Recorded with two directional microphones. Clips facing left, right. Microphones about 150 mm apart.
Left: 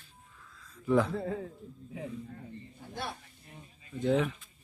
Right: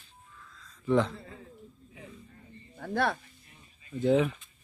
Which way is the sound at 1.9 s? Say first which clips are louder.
Left 11 dB; 80° left.